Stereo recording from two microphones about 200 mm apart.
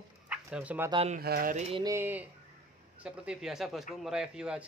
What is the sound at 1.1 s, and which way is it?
Speech, 45° right (ahead or behind).